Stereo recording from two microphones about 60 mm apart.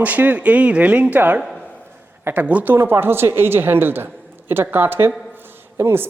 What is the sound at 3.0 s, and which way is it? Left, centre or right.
A woman's voice, right.